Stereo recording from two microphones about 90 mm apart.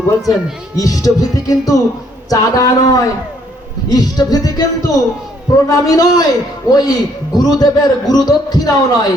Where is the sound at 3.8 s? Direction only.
45° left (ahead or behind).